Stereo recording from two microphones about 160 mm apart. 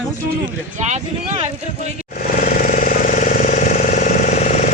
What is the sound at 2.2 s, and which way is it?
Vehicle, 60° left (ahead or behind).